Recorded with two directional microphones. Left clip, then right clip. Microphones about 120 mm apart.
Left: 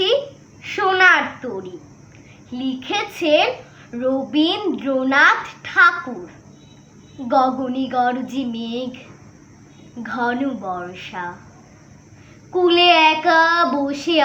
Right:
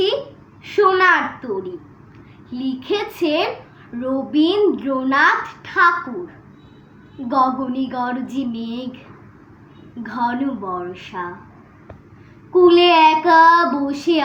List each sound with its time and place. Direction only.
0.6 s a sound: 15° left (ahead or behind)
2.5 s a child's voice: 10° left (ahead or behind)
7.3 s a child's voice: 15° left (ahead or behind)
12.5 s a child's voice: 15° left (ahead or behind)